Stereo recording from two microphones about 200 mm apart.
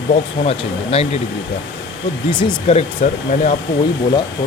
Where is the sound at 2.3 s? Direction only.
25° left (ahead or behind).